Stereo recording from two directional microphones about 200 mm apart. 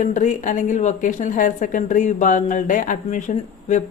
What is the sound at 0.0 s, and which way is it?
A woman's voice, 40° left (ahead or behind).